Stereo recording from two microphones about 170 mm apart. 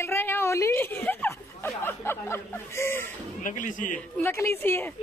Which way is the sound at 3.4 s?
50° left (ahead or behind).